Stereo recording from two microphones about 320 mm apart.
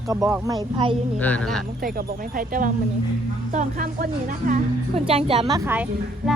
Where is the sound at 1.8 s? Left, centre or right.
Right; by 5.8 s centre.